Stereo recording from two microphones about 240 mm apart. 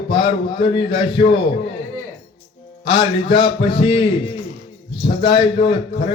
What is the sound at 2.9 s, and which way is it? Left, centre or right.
A man's voice, centre.